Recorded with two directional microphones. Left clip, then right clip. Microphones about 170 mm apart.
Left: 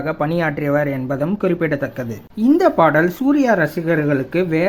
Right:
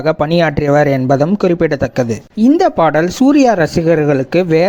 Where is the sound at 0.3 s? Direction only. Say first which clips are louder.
Right 7 dB; 40° right (ahead or behind).